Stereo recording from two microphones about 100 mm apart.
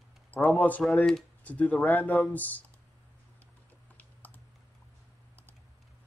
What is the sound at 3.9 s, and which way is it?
Typing, 15° left (ahead or behind).